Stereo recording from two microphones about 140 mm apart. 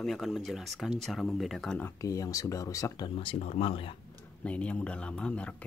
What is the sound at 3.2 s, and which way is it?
Speech, 45° left (ahead or behind).